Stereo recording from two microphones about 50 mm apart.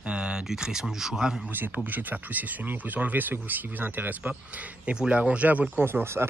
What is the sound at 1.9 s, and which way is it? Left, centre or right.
Speech, right.